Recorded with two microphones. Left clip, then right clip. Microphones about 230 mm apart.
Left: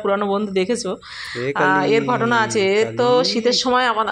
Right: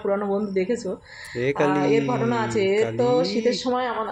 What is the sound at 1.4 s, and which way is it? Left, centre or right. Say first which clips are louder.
Speech: left 3 dB; centre.